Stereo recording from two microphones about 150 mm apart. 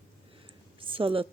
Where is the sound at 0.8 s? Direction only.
35° right (ahead or behind).